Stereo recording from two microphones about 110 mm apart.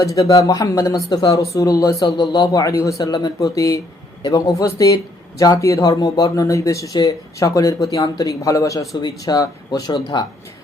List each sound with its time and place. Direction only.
0.0 s speech: 30° left (ahead or behind)